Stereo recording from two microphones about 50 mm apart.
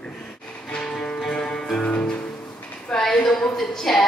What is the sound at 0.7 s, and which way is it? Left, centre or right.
Music, centre.